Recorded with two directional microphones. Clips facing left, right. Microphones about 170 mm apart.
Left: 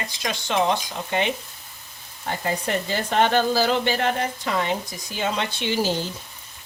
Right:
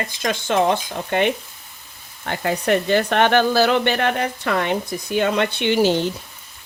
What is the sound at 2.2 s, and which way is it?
Speech, 70° right (ahead or behind).